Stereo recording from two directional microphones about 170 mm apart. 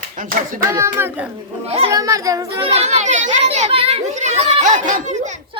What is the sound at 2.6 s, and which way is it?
A child's voice, 40° right (ahead or behind).